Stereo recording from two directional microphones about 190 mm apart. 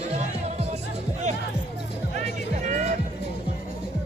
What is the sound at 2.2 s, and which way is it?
Music, 40° right (ahead or behind).